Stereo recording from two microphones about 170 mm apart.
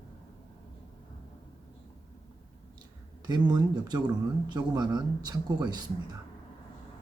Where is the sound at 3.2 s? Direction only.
25° right (ahead or behind).